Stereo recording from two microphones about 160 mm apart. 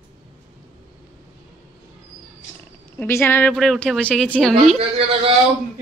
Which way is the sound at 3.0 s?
15° left (ahead or behind).